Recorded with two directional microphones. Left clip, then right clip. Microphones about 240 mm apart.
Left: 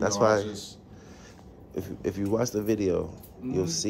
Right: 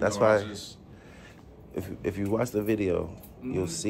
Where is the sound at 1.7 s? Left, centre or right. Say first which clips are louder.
Left 1 dB; centre.